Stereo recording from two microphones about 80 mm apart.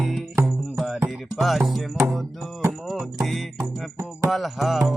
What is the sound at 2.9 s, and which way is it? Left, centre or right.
Music, centre.